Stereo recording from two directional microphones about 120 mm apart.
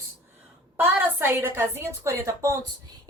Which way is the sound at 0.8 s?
20° right (ahead or behind).